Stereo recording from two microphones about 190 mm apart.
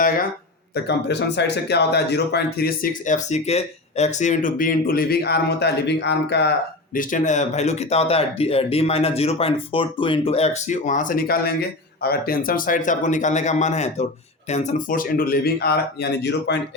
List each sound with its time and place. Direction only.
0.7 s speech: 65° left (ahead or behind)
6.9 s speech: 45° left (ahead or behind); by 16.6 s 60° left (ahead or behind)